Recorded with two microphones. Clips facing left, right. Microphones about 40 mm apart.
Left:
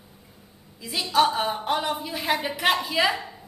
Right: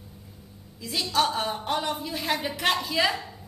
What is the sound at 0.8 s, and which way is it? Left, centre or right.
Speech, centre.